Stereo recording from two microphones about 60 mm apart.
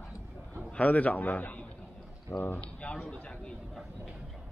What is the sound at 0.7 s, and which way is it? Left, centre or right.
A man's voice, left.